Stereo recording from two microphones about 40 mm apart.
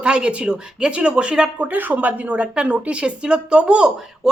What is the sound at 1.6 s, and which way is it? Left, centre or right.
A woman's voice, right.